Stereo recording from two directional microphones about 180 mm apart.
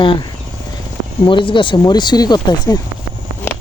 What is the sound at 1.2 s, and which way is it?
Speech, 30° left (ahead or behind).